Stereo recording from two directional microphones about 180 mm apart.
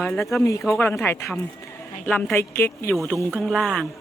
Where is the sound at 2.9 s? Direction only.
Centre (ahead or behind).